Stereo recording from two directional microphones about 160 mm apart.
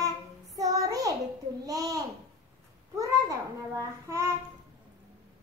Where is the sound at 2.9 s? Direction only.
20° right (ahead or behind).